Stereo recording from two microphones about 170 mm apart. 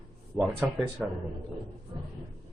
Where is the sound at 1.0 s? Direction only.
5° right (ahead or behind).